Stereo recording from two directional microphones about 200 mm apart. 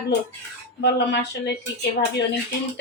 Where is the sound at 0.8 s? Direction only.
60° left (ahead or behind).